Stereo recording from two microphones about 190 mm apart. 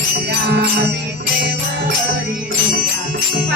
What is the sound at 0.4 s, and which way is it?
Music, 60° right (ahead or behind).